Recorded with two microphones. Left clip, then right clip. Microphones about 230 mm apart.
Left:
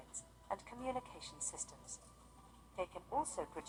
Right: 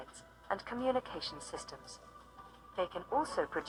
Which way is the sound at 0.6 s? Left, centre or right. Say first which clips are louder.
Right 9 dB; right.